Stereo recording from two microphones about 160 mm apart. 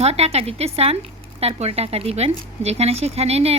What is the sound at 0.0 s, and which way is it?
Speech, 40° right (ahead or behind).